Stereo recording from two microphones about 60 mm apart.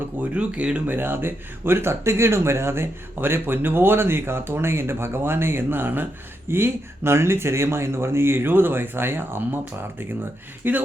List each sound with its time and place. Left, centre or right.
0.2 s speech: right
0.9 s speech: right
10.6 s speech: right